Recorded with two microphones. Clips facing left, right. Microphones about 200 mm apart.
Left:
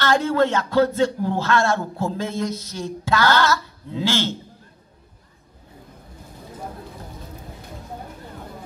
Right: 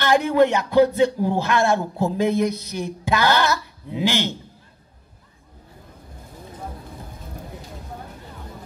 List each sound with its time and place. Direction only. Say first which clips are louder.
0.0 s speech: right 2 dB; 15° right (ahead or behind)